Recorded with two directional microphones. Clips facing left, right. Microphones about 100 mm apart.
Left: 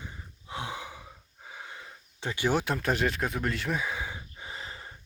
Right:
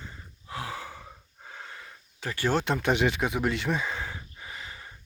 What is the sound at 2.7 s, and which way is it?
Speech, centre (ahead or behind).